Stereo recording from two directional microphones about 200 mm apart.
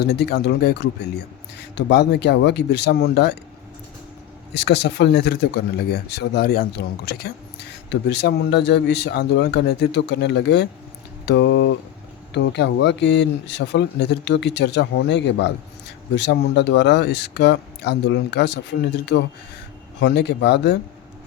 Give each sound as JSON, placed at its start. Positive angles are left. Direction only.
{"t": 0.0, "sound": "speech", "side_deg": 55}
{"t": 4.5, "sound": "speech", "side_deg": 55}